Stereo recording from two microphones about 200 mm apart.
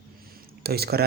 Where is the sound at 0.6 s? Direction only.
50° right (ahead or behind).